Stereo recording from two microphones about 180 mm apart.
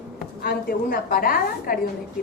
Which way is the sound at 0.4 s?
60° left (ahead or behind).